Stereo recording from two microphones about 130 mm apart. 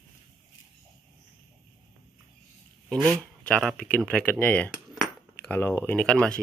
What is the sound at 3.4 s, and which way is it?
Speech, 5° left (ahead or behind).